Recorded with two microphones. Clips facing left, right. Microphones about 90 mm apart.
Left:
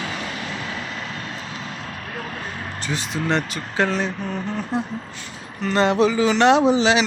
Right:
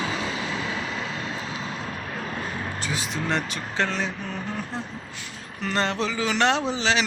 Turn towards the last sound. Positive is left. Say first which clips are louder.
# left 7 dB
turn(degrees=10)  # may be behind; listen again after turning